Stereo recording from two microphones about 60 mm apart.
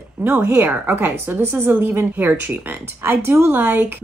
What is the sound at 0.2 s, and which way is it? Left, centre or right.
Speech, right.